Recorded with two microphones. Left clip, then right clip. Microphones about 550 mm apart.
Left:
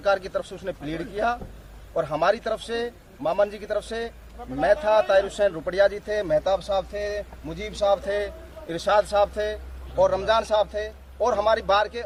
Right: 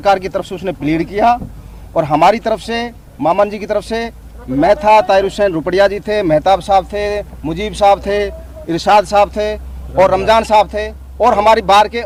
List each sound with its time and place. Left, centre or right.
0.0 s a man's voice: right